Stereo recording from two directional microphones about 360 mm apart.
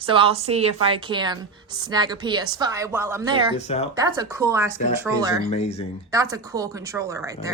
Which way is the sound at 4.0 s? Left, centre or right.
Centre.